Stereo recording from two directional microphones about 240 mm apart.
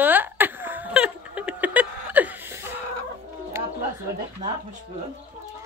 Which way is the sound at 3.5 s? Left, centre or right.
Centre.